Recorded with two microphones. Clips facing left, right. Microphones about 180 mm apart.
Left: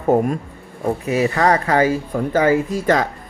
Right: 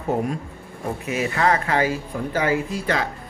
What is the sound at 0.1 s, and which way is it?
Speech, 45° left (ahead or behind).